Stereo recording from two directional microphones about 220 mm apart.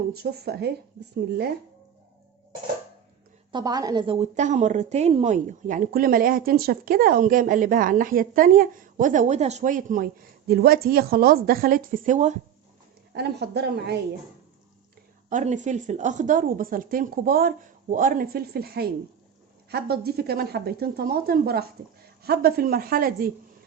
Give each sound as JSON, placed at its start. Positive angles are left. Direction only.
{"t": 0.1, "sound": "speech", "side_deg": -45}
{"t": 3.5, "sound": "a woman's voice", "side_deg": -15}
{"t": 13.1, "sound": "speech", "side_deg": -50}
{"t": 15.3, "sound": "a woman's voice", "side_deg": -35}